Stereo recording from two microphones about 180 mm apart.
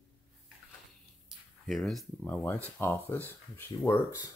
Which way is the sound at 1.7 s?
Centre (ahead or behind).